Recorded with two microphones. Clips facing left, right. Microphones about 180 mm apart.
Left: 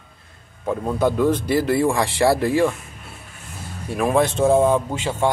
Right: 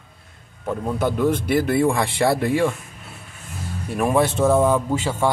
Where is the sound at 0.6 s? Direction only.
10° left (ahead or behind).